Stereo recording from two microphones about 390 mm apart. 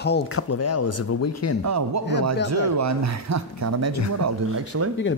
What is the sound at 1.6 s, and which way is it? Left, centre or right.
A man's voice, right.